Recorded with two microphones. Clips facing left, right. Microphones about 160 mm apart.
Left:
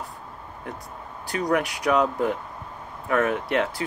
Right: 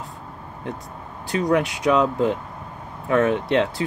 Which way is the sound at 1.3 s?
20° right (ahead or behind).